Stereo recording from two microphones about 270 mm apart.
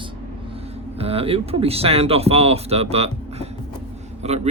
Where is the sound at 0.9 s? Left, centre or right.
Right.